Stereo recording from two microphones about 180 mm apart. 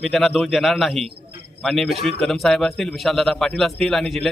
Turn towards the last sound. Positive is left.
turn(degrees=0)  # may be behind; listen again after turning